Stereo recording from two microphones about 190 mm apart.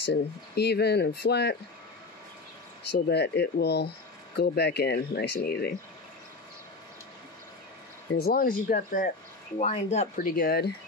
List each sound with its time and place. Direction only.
0.0 s speech: 60° left (ahead or behind)
2.9 s speech: 60° left (ahead or behind)
8.1 s speech: 55° left (ahead or behind)
9.6 s speech: 35° left (ahead or behind); by 10.7 s 55° left (ahead or behind)